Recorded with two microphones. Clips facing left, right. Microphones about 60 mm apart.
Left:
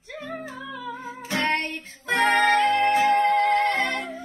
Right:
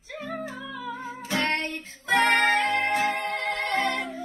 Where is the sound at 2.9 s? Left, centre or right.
Left.